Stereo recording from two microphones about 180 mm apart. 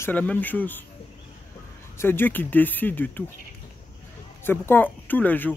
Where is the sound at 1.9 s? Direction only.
10° left (ahead or behind).